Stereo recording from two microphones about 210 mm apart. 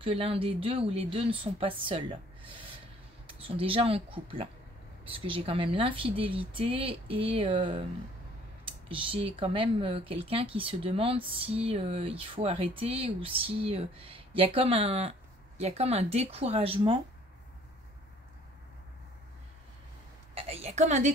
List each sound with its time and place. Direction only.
0.0 s speech: 25° right (ahead or behind)
8.8 s speech: 25° right (ahead or behind)
20.3 s a sound: 30° right (ahead or behind)